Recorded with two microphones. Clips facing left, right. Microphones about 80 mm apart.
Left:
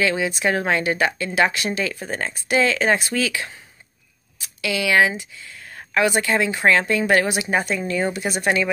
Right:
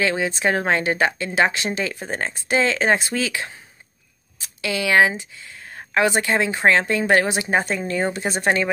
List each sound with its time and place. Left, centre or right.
0.0 s a woman's voice: right